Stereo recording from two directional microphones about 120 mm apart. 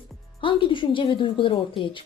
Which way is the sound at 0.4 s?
45° left (ahead or behind).